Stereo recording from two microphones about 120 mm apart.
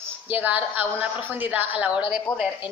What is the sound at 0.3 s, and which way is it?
A woman's voice, 15° right (ahead or behind).